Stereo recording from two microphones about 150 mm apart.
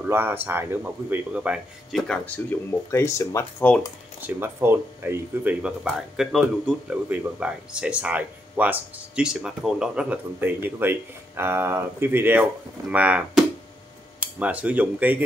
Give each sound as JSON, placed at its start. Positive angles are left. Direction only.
{"t": 0.0, "sound": "speech", "side_deg": -15}
{"t": 2.9, "sound": "speech", "side_deg": 20}
{"t": 4.2, "sound": "speech", "side_deg": -15}
{"t": 14.2, "sound": "speech", "side_deg": -10}